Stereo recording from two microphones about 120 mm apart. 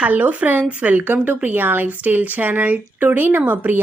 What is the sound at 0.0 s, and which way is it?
Speech, 10° right (ahead or behind).